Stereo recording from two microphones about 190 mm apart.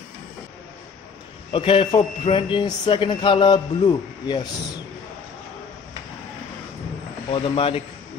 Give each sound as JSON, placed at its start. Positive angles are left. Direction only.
{"t": 1.5, "sound": "a man's voice", "side_deg": 25}
{"t": 7.2, "sound": "a man's voice", "side_deg": 30}